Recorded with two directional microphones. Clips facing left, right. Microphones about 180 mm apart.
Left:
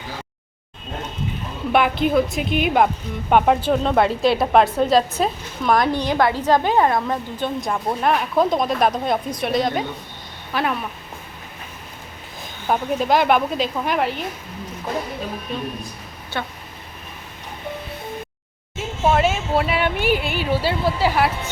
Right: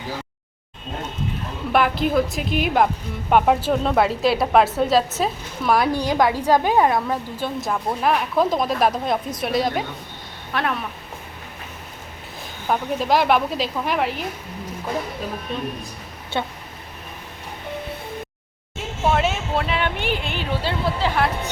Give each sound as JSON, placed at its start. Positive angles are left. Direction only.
{"t": 1.7, "sound": "speech", "side_deg": 0}
{"t": 12.6, "sound": "speech", "side_deg": 5}
{"t": 16.4, "sound": "speech", "side_deg": -20}
{"t": 19.1, "sound": "speech", "side_deg": 5}